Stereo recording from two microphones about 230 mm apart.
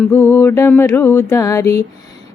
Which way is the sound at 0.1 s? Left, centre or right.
Centre.